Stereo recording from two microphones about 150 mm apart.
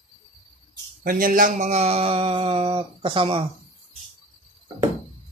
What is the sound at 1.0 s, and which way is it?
Speech, 70° right (ahead or behind).